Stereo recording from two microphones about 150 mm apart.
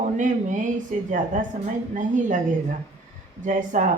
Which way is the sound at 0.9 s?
50° right (ahead or behind).